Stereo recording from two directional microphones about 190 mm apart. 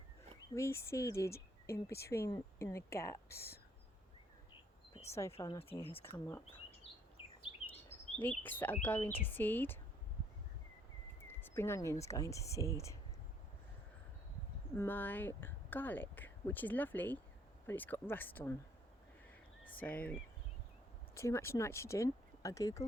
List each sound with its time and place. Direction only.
0.5 s speech: 15° left (ahead or behind)
5.4 s speech: 20° left (ahead or behind)
5.6 s speech: 30° left (ahead or behind)
6.0 s speech: 10° left (ahead or behind)
8.1 s speech: 10° left (ahead or behind)
11.3 s speech: 15° left (ahead or behind)
14.8 s speech: 10° left (ahead or behind)
19.8 s speech: 10° left (ahead or behind)
21.2 s speech: 15° left (ahead or behind)